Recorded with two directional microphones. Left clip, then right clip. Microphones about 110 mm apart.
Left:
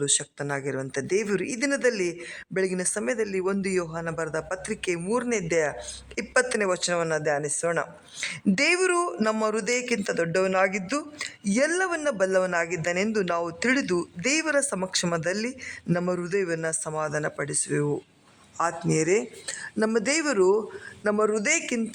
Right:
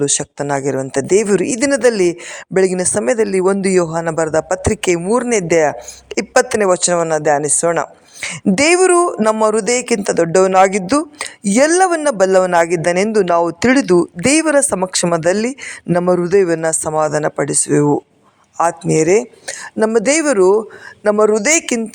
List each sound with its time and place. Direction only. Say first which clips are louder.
0.0 s a woman's voice: right 10 dB; 35° right (ahead or behind)